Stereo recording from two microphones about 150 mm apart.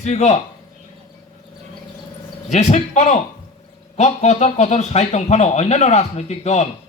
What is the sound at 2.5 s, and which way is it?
Speech, 50° left (ahead or behind).